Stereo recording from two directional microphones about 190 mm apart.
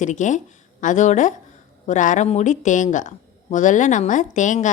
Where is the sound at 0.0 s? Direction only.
40° left (ahead or behind).